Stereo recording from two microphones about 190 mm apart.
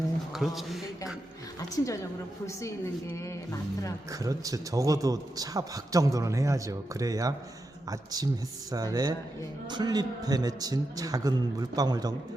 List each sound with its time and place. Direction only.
0.3 s a sound: centre (ahead or behind)
1.7 s a woman's voice: 15° left (ahead or behind)
4.1 s a man's voice: 20° right (ahead or behind)